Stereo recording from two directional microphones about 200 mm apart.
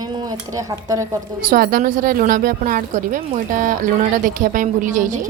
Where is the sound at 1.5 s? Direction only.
45° right (ahead or behind).